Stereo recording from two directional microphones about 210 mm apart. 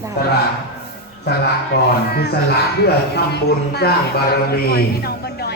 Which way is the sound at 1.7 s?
55° left (ahead or behind).